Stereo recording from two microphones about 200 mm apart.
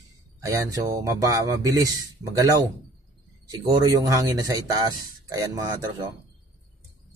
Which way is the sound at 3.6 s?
15° right (ahead or behind).